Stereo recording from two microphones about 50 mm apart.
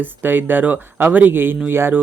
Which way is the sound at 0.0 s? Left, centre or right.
Right.